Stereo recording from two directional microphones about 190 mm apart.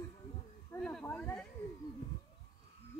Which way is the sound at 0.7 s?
10° left (ahead or behind).